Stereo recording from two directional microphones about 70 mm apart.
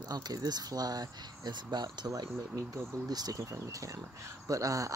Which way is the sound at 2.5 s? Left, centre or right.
Right.